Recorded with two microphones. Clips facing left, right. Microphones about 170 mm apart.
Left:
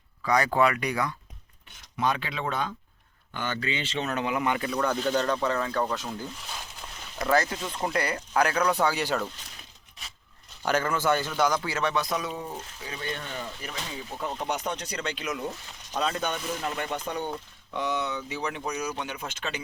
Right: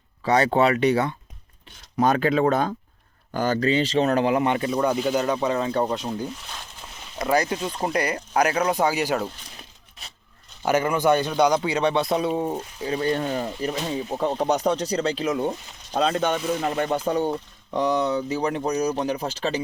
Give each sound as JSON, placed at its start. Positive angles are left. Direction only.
{"t": 0.2, "sound": "a man's voice", "side_deg": -30}
{"t": 2.0, "sound": "speech", "side_deg": -45}
{"t": 4.9, "sound": "speech", "side_deg": -10}
{"t": 6.4, "sound": "a sound", "side_deg": 0}
{"t": 7.2, "sound": "a man's voice", "side_deg": -15}
{"t": 8.8, "sound": "speech", "side_deg": -10}
{"t": 10.6, "sound": "a man's voice", "side_deg": -15}
{"t": 16.2, "sound": "speech", "side_deg": -55}
{"t": 16.6, "sound": "speech", "side_deg": -35}